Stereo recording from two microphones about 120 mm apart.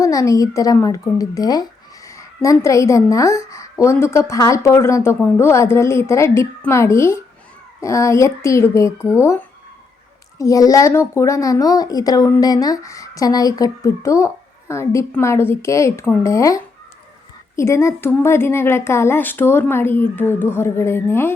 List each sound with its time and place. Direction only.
0.0 s a woman's voice: 25° left (ahead or behind)
10.3 s speech: 30° left (ahead or behind)